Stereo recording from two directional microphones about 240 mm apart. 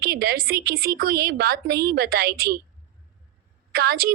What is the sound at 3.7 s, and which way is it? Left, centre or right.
Speech, right.